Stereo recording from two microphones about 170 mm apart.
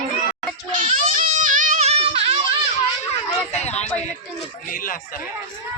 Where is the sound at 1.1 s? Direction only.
50° right (ahead or behind); by 2.4 s 35° right (ahead or behind).